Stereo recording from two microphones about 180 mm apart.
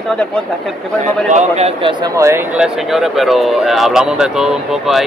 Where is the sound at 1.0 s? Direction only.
40° right (ahead or behind).